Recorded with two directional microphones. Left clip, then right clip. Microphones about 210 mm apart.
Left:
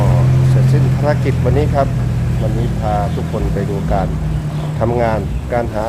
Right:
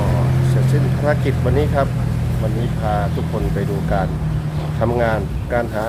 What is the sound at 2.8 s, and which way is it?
Speech, 5° left (ahead or behind).